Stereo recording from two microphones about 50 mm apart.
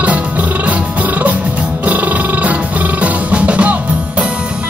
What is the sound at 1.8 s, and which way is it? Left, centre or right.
Music, right.